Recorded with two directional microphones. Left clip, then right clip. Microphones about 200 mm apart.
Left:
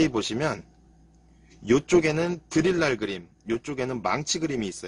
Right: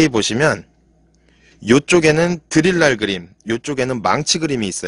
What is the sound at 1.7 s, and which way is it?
A man's voice, 50° right (ahead or behind).